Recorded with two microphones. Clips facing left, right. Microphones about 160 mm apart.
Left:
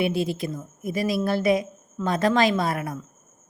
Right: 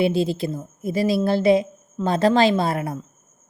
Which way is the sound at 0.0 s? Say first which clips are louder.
Right 4 dB; 30° right (ahead or behind).